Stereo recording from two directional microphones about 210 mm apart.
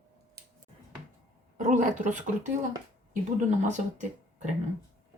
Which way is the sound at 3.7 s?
35° right (ahead or behind).